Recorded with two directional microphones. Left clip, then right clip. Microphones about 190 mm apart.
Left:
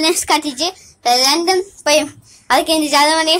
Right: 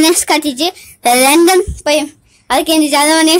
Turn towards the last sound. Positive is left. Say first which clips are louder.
# right 3 dB
turn(degrees=-30)  # may be behind; listen again after turning